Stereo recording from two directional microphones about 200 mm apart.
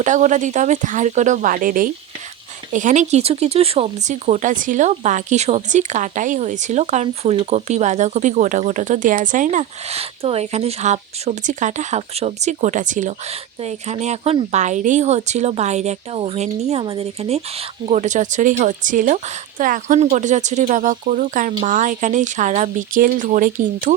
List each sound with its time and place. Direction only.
0.0 s speech: 40° right (ahead or behind)